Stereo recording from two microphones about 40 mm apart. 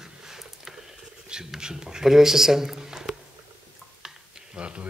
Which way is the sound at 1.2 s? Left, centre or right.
Centre.